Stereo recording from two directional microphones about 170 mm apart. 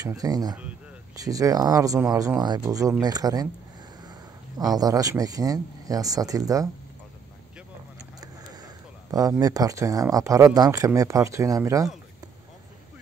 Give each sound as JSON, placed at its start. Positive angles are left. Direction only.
{"t": 0.0, "sound": "speech", "side_deg": -20}
{"t": 4.0, "sound": "a sound", "side_deg": -25}
{"t": 4.7, "sound": "speech", "side_deg": -20}
{"t": 9.4, "sound": "speech", "side_deg": -20}